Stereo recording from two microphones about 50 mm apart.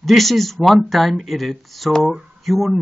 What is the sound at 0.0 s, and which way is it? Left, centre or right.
Speech, centre.